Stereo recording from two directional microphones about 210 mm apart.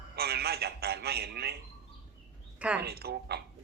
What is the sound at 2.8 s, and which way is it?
Speech, 50° right (ahead or behind).